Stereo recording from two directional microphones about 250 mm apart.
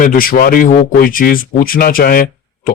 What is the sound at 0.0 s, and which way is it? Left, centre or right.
Speech, left.